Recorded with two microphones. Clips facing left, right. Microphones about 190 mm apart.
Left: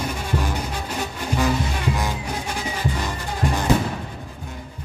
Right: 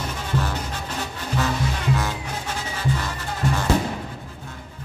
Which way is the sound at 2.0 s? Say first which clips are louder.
Left 1 dB; 15° left (ahead or behind).